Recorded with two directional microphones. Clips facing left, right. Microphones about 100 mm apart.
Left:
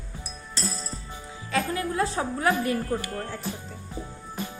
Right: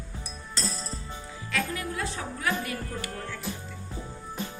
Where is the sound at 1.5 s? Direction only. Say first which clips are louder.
Left 6 dB; 30° left (ahead or behind).